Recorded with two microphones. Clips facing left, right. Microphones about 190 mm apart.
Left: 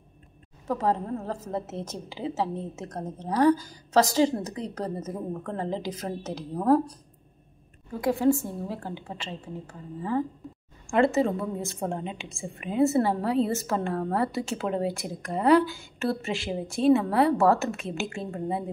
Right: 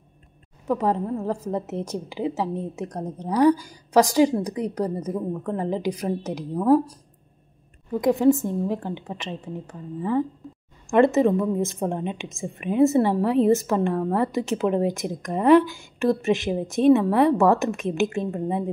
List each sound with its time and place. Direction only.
0.7 s a woman's voice: 15° right (ahead or behind)
8.0 s a woman's voice: 20° right (ahead or behind)